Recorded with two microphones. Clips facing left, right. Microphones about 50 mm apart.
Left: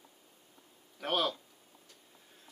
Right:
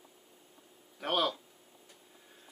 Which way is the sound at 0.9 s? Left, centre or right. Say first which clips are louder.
Right 1 dB; centre.